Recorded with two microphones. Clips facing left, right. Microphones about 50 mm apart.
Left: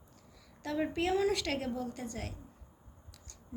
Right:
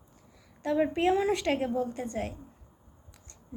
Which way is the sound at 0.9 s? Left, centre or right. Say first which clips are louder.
Right 5 dB; right.